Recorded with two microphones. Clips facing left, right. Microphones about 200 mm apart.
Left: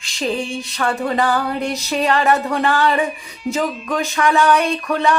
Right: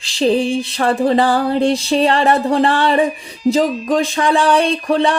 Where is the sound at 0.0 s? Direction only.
30° right (ahead or behind).